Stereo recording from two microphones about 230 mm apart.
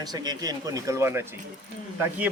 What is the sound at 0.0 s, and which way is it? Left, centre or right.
Speech, centre.